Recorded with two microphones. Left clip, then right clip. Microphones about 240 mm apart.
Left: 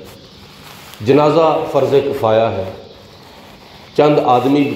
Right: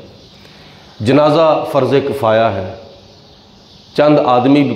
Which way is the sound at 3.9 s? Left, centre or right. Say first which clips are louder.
Right 1 dB; right.